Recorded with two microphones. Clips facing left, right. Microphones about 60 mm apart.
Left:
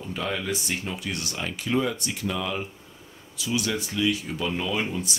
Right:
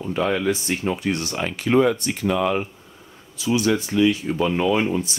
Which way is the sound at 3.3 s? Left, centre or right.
Right.